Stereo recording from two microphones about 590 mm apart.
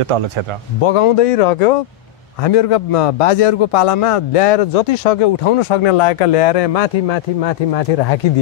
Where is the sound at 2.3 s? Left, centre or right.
Left.